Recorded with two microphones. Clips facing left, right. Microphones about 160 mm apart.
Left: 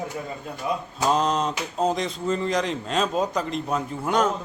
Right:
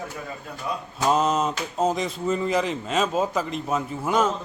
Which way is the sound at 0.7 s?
20° left (ahead or behind).